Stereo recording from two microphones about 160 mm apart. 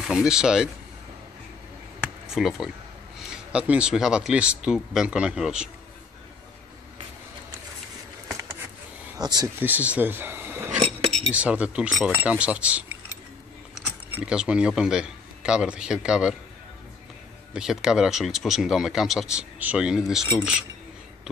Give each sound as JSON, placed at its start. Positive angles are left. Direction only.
{"t": 0.0, "sound": "speech", "side_deg": -5}
{"t": 2.2, "sound": "speech", "side_deg": -5}
{"t": 8.3, "sound": "a sound", "side_deg": -15}
{"t": 9.2, "sound": "speech", "side_deg": -25}
{"t": 9.6, "sound": "speech", "side_deg": -10}
{"t": 14.2, "sound": "speech", "side_deg": -5}
{"t": 17.6, "sound": "speech", "side_deg": -5}